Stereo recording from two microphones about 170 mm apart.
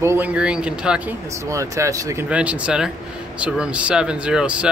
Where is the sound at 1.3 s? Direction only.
15° right (ahead or behind).